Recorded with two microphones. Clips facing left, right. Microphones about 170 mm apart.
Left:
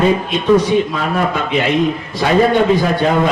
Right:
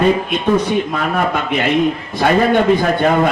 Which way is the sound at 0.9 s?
55° right (ahead or behind).